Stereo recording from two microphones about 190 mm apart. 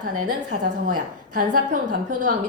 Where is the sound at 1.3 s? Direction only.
45° right (ahead or behind).